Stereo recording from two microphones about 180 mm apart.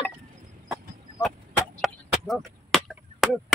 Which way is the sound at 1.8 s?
Centre (ahead or behind).